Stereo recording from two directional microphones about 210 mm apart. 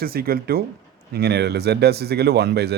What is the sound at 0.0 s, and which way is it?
Speech, 45° right (ahead or behind).